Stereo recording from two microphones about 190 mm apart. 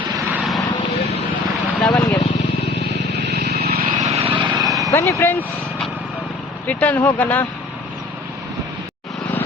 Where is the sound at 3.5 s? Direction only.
55° right (ahead or behind).